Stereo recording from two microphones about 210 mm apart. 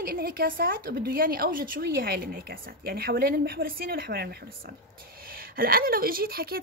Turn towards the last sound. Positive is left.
turn(degrees=-45)  # may be behind; listen again after turning